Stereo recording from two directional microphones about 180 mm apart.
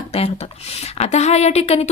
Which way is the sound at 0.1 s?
35° left (ahead or behind).